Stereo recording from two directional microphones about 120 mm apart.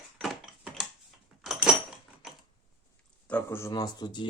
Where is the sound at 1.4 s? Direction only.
5° right (ahead or behind).